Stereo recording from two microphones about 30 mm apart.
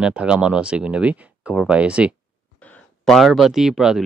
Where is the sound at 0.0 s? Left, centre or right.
Right.